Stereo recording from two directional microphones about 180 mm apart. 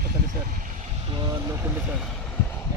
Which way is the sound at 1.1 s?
25° right (ahead or behind).